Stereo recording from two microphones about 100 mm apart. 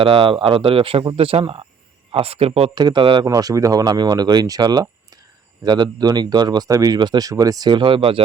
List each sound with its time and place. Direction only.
0.0 s speech: 65° right (ahead or behind)
2.7 s speech: 50° right (ahead or behind)
3.2 s speech: 35° right (ahead or behind); by 8.2 s 65° right (ahead or behind)